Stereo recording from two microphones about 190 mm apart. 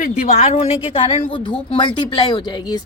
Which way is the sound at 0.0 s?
35° left (ahead or behind).